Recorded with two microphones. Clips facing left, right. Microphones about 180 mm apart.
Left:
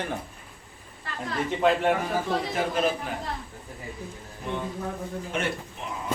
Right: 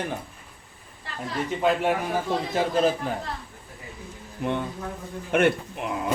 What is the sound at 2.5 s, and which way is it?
Speech, 35° right (ahead or behind).